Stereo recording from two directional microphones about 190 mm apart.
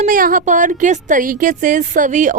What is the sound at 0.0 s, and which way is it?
A woman's voice, 45° right (ahead or behind).